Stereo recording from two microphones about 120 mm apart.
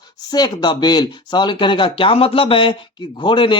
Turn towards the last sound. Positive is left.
turn(degrees=45)  # may be behind; listen again after turning